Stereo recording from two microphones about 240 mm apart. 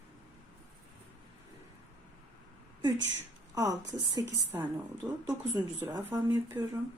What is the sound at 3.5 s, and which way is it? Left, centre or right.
Speech, centre.